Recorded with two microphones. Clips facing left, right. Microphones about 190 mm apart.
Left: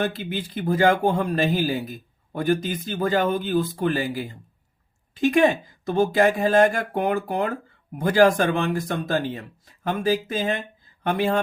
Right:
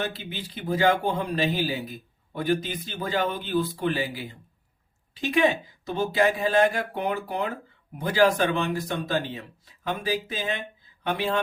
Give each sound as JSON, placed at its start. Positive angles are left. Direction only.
{"t": 0.0, "sound": "speech", "side_deg": 50}